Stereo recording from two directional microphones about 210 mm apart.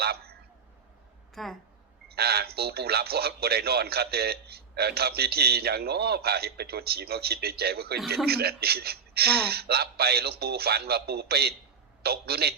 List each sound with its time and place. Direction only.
0.0 s a sound: 50° right (ahead or behind)
1.4 s speech: centre (ahead or behind)
2.0 s speech: 50° right (ahead or behind)